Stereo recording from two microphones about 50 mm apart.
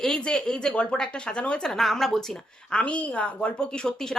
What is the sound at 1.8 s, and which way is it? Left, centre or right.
Speech, centre.